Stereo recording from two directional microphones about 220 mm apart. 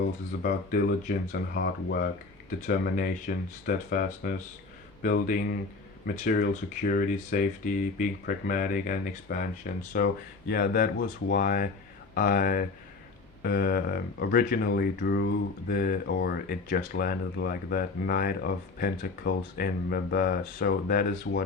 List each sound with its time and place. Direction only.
0.4 s speech: 40° left (ahead or behind)